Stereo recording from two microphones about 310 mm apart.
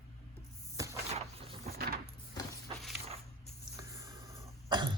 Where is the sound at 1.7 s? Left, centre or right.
Right.